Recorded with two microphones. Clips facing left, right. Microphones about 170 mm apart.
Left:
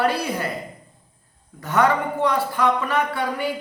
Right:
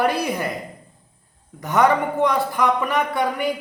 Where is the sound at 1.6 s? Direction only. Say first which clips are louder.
Right 2 dB; 20° right (ahead or behind).